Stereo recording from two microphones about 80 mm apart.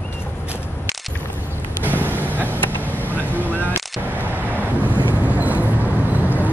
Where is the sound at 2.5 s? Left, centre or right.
Left.